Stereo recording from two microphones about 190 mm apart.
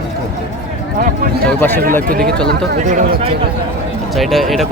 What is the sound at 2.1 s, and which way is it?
Speech, 50° right (ahead or behind).